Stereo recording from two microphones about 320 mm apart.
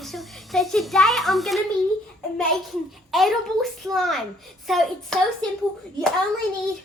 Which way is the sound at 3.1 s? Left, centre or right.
Centre.